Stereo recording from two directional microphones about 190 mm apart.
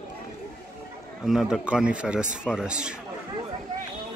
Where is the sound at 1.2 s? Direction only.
Centre (ahead or behind).